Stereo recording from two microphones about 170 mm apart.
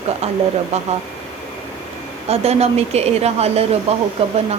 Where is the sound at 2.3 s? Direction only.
40° right (ahead or behind).